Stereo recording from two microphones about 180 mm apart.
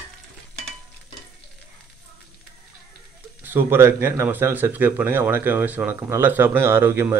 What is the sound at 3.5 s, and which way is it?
Speech, 10° right (ahead or behind).